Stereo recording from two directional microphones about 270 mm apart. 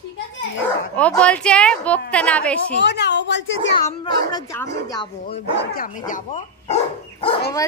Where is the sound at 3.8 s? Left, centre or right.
Centre.